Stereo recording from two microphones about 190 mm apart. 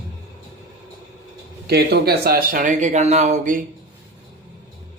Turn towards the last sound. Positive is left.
turn(degrees=-40)  # may be behind; listen again after turning